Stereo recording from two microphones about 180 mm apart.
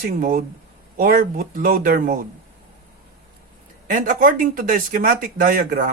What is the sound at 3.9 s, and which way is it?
Speech, 50° right (ahead or behind).